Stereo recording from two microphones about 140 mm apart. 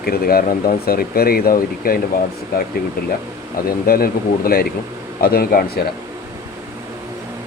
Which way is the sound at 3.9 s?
90° left.